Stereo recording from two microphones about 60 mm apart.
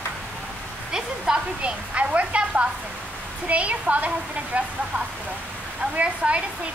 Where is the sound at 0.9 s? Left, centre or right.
Centre.